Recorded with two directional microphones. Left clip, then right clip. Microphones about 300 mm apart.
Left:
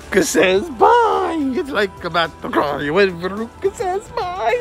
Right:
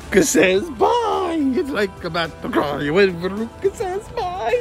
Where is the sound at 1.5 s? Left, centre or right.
Centre.